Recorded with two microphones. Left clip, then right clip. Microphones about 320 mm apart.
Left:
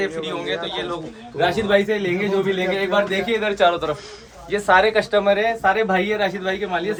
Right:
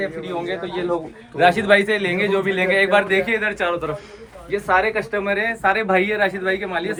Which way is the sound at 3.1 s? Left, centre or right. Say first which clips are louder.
Right 2 dB; centre.